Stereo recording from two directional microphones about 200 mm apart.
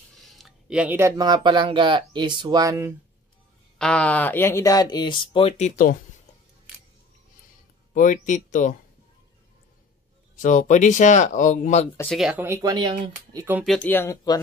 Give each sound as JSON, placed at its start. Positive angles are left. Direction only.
{"t": 0.4, "sound": "speech", "side_deg": 0}
{"t": 3.7, "sound": "speech", "side_deg": 5}
{"t": 7.9, "sound": "speech", "side_deg": 40}
{"t": 10.3, "sound": "speech", "side_deg": 40}
{"t": 12.0, "sound": "speech", "side_deg": 0}
{"t": 12.6, "sound": "speech", "side_deg": -20}
{"t": 13.7, "sound": "speech", "side_deg": 10}